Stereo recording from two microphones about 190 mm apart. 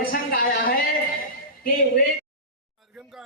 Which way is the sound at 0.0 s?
50° left (ahead or behind).